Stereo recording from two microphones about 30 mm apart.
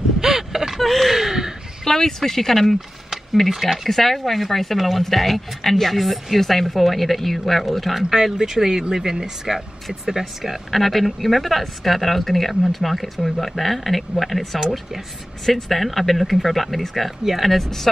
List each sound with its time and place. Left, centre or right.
0.2 s a sound: centre
0.7 s a sound: centre
1.9 s speech: centre
3.9 s speech: centre
8.4 s speech: centre
10.7 s speech: centre